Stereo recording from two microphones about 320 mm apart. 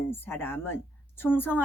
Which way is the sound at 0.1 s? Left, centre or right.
Centre.